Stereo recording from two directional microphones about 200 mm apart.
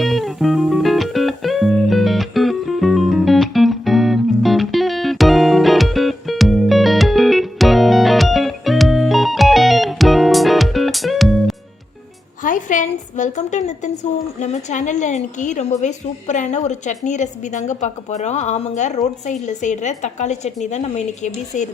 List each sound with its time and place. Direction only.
0.0 s music: centre (ahead or behind)
12.4 s a woman's voice: 40° left (ahead or behind)